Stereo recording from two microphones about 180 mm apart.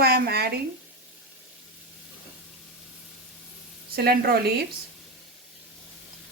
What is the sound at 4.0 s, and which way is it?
Speech, 60° right (ahead or behind).